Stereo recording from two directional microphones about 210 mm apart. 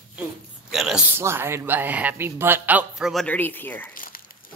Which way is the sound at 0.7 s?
Centre (ahead or behind).